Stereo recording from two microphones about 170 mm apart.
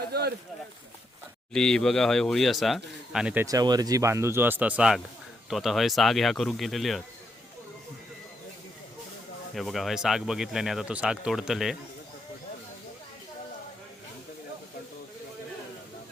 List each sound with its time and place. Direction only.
0.1 s a sound: 70° right (ahead or behind)
1.5 s speech: 5° left (ahead or behind)
3.4 s speech: 20° right (ahead or behind); by 7.0 s centre (ahead or behind)
9.6 s speech: centre (ahead or behind)